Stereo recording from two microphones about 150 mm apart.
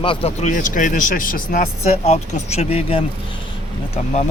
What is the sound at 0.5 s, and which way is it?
Speech, 60° left (ahead or behind).